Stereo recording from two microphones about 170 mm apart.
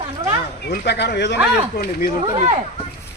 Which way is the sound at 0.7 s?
85° left.